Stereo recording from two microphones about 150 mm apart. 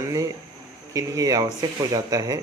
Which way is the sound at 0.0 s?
20° right (ahead or behind).